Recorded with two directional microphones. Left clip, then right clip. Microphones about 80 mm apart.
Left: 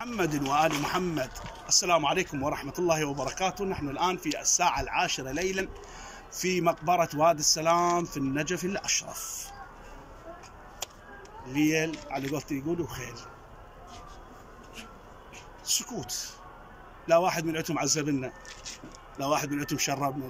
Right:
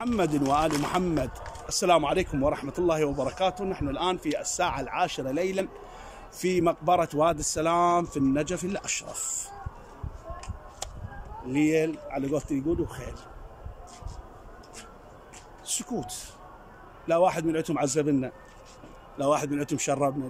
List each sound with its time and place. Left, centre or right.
0.0 s speech: right
11.4 s speech: right
15.6 s speech: right
17.0 s speech: right